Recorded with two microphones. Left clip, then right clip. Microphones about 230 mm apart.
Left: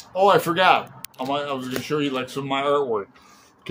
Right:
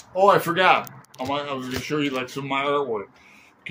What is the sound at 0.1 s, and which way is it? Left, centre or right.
Speech, centre.